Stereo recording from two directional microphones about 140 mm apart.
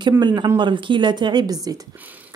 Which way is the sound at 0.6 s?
35° right (ahead or behind).